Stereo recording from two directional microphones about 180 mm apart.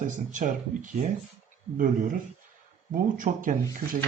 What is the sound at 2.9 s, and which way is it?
Speech, 50° right (ahead or behind).